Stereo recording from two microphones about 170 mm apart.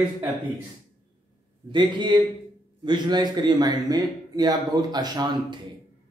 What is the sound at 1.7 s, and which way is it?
A man's voice, 25° right (ahead or behind).